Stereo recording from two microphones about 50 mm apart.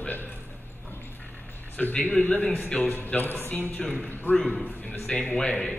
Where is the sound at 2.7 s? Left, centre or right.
Left.